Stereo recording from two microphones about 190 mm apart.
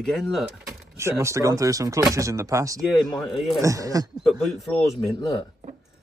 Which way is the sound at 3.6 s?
20° right (ahead or behind).